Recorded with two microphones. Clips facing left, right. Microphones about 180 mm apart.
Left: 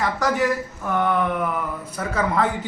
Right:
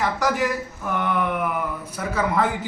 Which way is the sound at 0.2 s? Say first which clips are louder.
Left 4 dB; centre (ahead or behind).